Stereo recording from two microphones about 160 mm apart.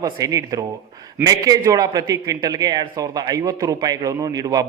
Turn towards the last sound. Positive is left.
turn(degrees=-25)  # may be behind; listen again after turning